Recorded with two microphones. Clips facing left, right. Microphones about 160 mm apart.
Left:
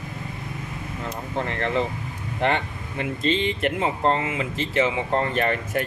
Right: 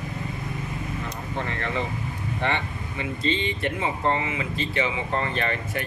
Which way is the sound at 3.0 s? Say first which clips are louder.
Left 3 dB; 60° left (ahead or behind).